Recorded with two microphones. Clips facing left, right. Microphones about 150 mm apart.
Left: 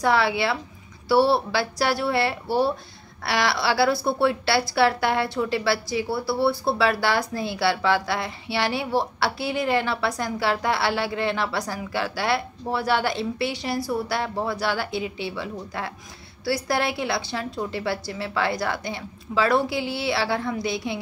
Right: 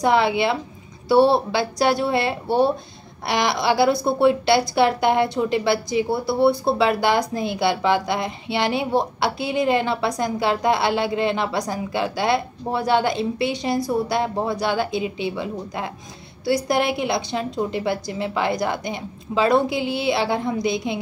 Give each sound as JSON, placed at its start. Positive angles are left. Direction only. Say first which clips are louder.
{"t": 0.0, "sound": "a woman's voice", "louder": "right 3 dB", "side_deg": -20}